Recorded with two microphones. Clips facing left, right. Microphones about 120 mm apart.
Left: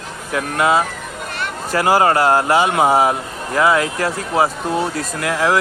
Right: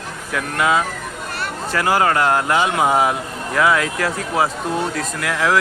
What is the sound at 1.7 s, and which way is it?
Speech, 40° left (ahead or behind).